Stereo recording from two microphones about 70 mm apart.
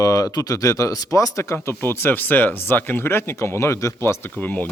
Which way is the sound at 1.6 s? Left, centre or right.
Left.